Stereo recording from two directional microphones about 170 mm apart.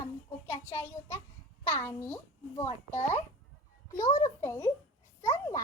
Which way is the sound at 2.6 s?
40° left (ahead or behind).